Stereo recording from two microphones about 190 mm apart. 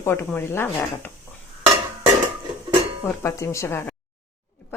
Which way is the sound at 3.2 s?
15° left (ahead or behind).